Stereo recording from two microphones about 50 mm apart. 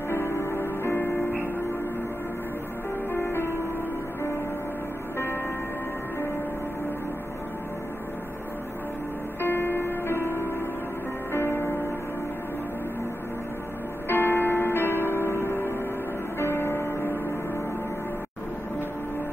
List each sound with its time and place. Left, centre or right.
0.4 s music: left
0.9 s music: left
3.1 s music: left
9.4 s music: left
14.0 s music: left